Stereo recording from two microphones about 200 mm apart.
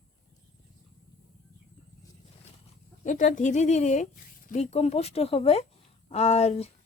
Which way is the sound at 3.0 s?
40° left (ahead or behind).